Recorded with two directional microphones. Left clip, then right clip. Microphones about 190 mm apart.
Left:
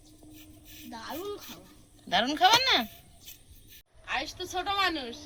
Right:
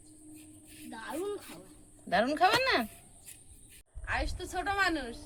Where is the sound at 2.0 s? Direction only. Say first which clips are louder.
Left 3 dB; 25° right (ahead or behind).